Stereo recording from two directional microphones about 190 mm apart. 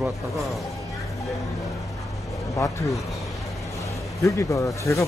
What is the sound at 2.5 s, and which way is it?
Speech, 15° left (ahead or behind).